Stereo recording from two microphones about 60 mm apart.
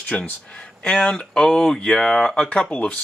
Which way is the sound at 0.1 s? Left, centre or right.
Centre.